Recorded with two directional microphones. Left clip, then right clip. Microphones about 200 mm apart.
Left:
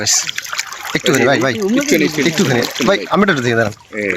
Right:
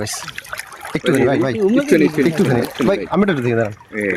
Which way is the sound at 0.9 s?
Centre (ahead or behind).